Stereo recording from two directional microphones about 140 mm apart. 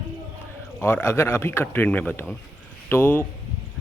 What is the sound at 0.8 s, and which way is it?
Speech, 15° left (ahead or behind).